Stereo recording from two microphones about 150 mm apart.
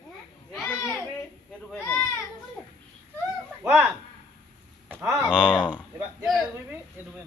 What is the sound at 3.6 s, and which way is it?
Speech, 15° right (ahead or behind).